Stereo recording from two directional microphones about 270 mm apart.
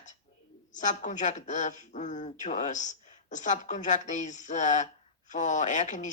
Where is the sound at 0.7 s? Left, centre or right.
Left.